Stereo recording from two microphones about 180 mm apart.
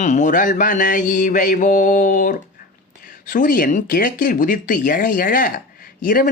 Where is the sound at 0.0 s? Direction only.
40° left (ahead or behind).